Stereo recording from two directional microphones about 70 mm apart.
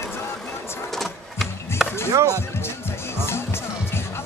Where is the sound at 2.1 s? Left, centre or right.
Right.